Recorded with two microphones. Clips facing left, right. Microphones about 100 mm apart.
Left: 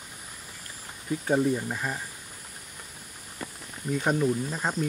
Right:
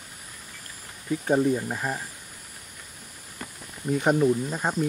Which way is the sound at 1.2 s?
10° right (ahead or behind).